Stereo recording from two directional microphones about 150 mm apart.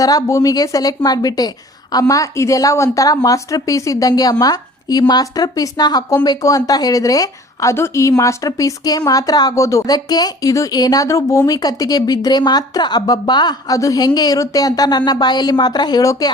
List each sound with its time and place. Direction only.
0.0 s speech: 25° left (ahead or behind)